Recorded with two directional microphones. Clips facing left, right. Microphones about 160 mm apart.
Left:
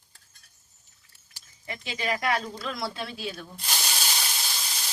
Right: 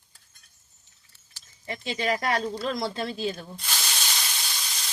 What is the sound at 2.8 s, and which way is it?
Speech, 30° right (ahead or behind).